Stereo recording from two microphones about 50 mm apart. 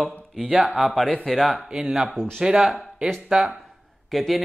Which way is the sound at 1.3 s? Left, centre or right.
Centre.